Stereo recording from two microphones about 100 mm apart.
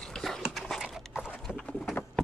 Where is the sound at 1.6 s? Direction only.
Centre (ahead or behind).